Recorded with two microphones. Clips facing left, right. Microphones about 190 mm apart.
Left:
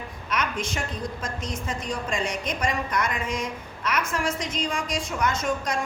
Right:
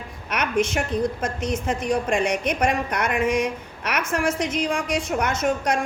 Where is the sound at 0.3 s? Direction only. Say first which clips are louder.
Right 6 dB; 60° right (ahead or behind).